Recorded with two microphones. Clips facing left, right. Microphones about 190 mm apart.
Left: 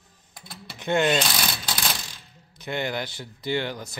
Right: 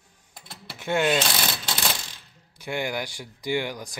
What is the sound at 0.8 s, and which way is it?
Speech, 5° right (ahead or behind).